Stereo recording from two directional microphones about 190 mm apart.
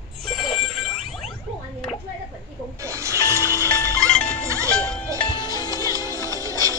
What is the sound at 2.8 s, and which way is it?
Music, 15° right (ahead or behind).